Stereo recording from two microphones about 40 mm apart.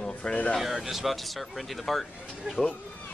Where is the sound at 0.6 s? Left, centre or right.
Centre.